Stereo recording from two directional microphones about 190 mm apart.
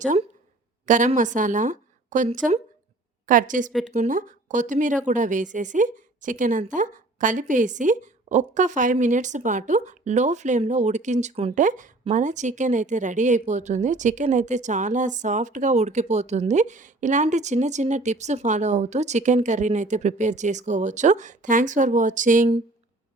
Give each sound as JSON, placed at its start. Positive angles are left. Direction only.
{"t": 0.0, "sound": "a woman's voice", "side_deg": -40}
{"t": 3.7, "sound": "speech", "side_deg": 0}
{"t": 3.9, "sound": "a woman's voice", "side_deg": -40}